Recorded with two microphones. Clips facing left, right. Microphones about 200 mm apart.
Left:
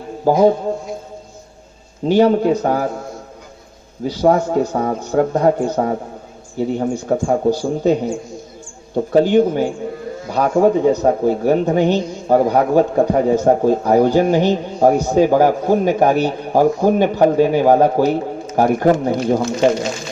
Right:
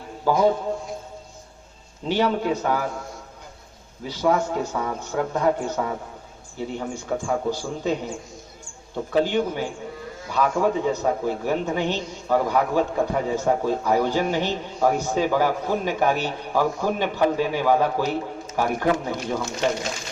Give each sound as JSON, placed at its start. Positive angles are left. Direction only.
{"t": 0.3, "sound": "speech", "side_deg": 45}
{"t": 2.0, "sound": "speech", "side_deg": 45}
{"t": 4.0, "sound": "speech", "side_deg": 40}